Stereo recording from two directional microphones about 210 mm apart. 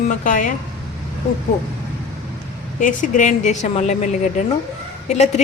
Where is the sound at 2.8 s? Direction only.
35° left (ahead or behind).